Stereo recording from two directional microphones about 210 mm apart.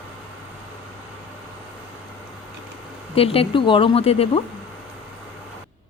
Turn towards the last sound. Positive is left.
turn(degrees=30)  # may be behind; listen again after turning